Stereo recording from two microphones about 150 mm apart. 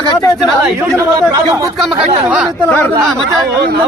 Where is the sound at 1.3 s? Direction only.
25° right (ahead or behind).